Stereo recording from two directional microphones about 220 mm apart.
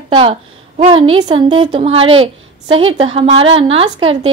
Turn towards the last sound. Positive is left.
turn(degrees=-25)  # may be behind; listen again after turning